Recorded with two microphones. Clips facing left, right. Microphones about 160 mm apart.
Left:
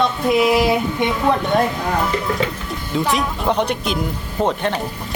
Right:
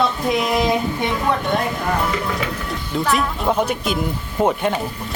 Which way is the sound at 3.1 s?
5° right (ahead or behind).